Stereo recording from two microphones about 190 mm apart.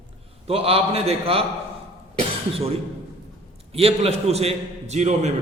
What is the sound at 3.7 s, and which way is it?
A man's voice, 30° right (ahead or behind).